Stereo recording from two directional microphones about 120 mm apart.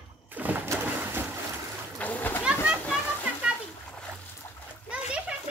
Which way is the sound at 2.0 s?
15° left (ahead or behind).